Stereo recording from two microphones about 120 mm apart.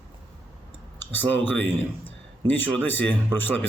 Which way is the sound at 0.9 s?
15° left (ahead or behind).